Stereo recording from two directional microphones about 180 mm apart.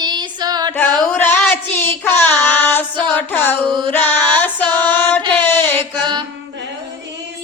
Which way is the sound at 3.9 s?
10° left (ahead or behind).